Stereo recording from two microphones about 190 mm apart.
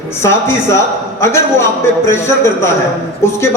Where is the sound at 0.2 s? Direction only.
15° left (ahead or behind).